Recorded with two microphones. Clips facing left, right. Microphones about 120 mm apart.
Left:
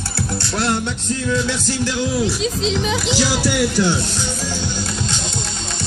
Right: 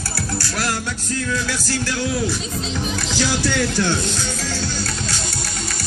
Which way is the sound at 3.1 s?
15° left (ahead or behind).